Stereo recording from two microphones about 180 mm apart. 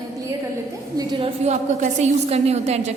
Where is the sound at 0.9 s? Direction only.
25° right (ahead or behind).